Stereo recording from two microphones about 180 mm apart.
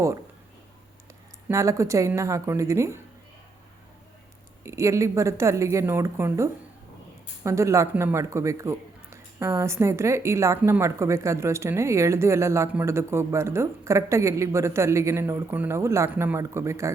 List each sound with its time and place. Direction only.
1.5 s speech: 15° right (ahead or behind)
4.6 s speech: 15° right (ahead or behind)